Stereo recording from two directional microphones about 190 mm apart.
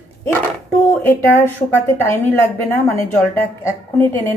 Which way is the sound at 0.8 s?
10° left (ahead or behind).